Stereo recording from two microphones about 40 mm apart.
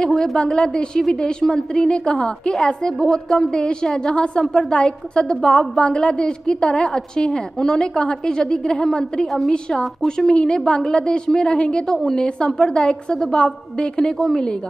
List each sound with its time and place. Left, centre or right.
0.0 s a woman's voice: left
11.9 s a woman's voice: centre
12.2 s a woman's voice: left